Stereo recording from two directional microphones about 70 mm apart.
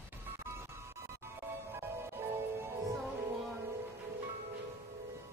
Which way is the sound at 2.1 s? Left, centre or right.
Right.